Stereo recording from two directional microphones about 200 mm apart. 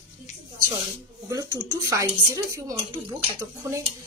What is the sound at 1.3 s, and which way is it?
Speech, 15° right (ahead or behind).